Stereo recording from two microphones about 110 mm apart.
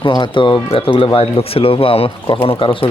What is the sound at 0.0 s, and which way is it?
Speech, 45° left (ahead or behind).